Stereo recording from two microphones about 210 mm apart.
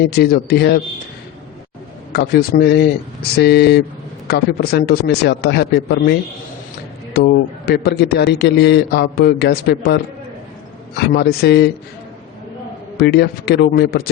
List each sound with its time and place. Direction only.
0.1 s a man's voice: 45° left (ahead or behind)
2.1 s a man's voice: 50° left (ahead or behind)
7.1 s a man's voice: 50° left (ahead or behind)
13.0 s a man's voice: 50° left (ahead or behind)